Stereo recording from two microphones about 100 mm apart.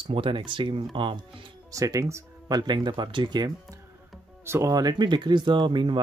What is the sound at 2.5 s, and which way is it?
Speech, 45° right (ahead or behind).